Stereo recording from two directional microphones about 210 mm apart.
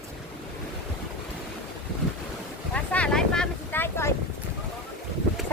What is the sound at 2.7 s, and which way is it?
Vehicle, 5° left (ahead or behind).